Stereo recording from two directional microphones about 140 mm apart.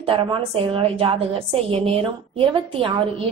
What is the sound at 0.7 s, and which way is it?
A woman's voice, 40° right (ahead or behind).